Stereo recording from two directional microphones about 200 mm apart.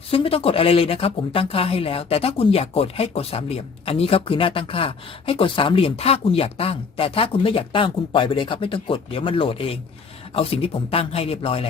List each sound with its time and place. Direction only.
0.1 s speech: 30° left (ahead or behind)